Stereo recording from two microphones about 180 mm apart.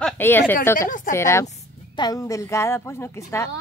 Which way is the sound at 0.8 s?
45° left (ahead or behind).